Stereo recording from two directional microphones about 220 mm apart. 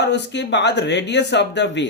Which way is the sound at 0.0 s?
50° left (ahead or behind).